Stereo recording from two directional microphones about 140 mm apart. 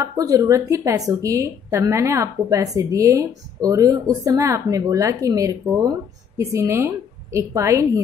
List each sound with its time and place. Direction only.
0.0 s a woman's voice: 20° right (ahead or behind)